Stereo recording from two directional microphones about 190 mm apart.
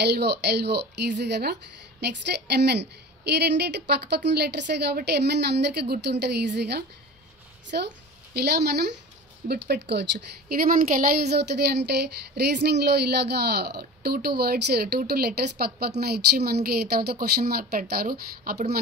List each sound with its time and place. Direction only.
0.0 s a woman's voice: 60° right (ahead or behind)
10.1 s a woman's voice: 50° right (ahead or behind)